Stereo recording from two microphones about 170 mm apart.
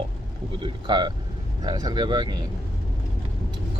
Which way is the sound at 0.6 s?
25° right (ahead or behind).